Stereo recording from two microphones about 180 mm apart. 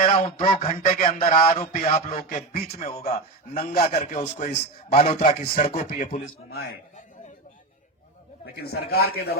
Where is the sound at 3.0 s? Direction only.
35° left (ahead or behind).